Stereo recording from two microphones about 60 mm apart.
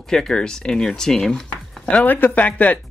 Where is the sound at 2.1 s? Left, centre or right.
Left.